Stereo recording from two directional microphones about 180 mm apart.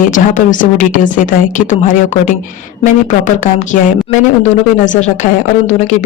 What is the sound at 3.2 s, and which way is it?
Speech, 45° left (ahead or behind).